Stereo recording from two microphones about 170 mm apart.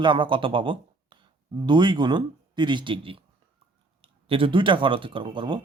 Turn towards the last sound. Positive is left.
turn(degrees=-30)  # may be behind; listen again after turning